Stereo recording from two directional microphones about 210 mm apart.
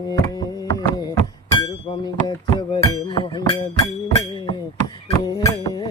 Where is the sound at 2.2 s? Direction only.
20° left (ahead or behind).